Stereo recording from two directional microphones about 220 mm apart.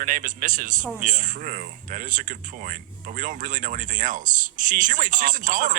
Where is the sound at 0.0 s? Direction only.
40° right (ahead or behind).